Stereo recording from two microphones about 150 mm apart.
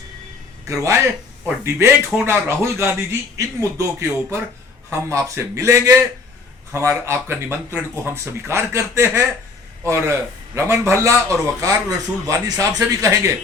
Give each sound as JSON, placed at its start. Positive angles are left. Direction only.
{"t": 0.7, "sound": "a man's voice", "side_deg": -20}